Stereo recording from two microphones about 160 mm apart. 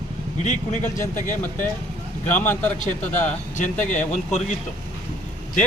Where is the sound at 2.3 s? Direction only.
10° left (ahead or behind).